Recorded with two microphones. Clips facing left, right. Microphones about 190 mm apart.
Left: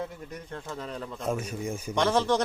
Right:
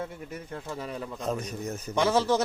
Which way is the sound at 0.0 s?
5° right (ahead or behind).